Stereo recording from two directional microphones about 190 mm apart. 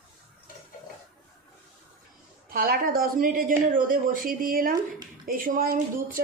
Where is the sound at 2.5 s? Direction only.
50° right (ahead or behind).